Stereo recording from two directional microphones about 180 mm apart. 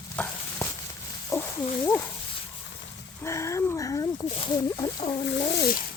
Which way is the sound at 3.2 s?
15° left (ahead or behind).